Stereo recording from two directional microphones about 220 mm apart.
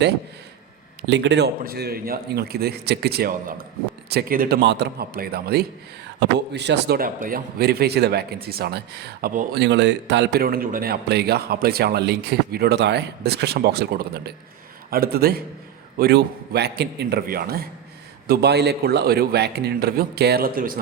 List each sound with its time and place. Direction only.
1.0 s speech: 50° right (ahead or behind)
9.6 s speech: 50° right (ahead or behind)